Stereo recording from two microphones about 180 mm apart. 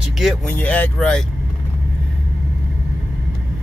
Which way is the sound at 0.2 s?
Centre (ahead or behind).